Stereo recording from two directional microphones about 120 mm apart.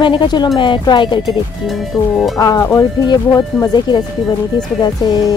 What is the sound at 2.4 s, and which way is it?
Speech, 30° left (ahead or behind).